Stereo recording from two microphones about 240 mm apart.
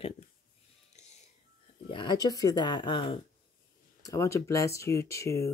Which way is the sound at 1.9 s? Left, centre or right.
Centre.